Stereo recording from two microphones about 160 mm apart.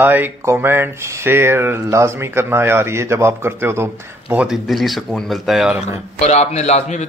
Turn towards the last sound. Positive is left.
turn(degrees=45)  # may be behind; listen again after turning